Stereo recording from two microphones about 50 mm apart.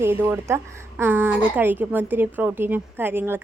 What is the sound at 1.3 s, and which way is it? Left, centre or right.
A woman's voice, right.